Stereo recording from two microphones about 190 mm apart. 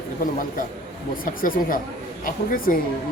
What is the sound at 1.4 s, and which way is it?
Speech, 45° left (ahead or behind).